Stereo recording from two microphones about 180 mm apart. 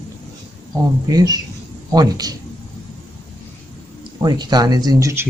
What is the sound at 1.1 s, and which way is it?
Speech, 20° right (ahead or behind).